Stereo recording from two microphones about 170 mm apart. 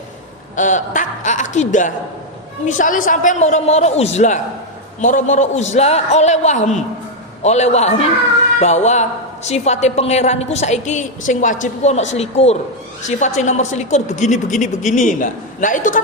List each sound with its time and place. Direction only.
0.5 s a woman's voice: 50° left (ahead or behind)